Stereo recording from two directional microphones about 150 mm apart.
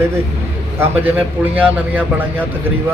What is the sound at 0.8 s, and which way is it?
A man's voice, 15° right (ahead or behind).